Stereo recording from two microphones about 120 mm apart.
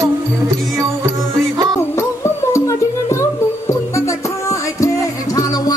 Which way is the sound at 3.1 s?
25° left (ahead or behind).